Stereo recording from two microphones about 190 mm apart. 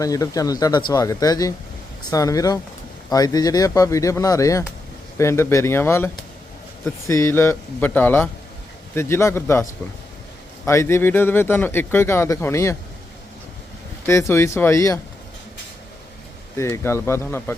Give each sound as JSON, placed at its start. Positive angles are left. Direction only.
{"t": 0.0, "sound": "speech", "side_deg": 20}
{"t": 10.7, "sound": "speech", "side_deg": 15}
{"t": 14.1, "sound": "speech", "side_deg": 15}
{"t": 16.6, "sound": "speech", "side_deg": 15}